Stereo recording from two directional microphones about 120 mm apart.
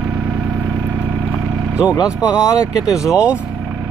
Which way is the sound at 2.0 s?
5° right (ahead or behind).